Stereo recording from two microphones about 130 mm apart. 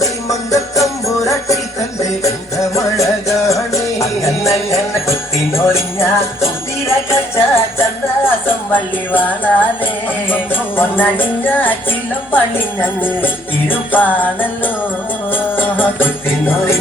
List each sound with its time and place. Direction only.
0.0 s jingle bell: 25° left (ahead or behind)
2.0 s music: 25° left (ahead or behind)
5.0 s jingle bell: 20° left (ahead or behind)
6.8 s music: 20° left (ahead or behind)